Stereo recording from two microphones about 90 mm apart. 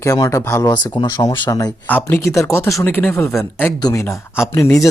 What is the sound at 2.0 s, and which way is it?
Speech, 30° left (ahead or behind).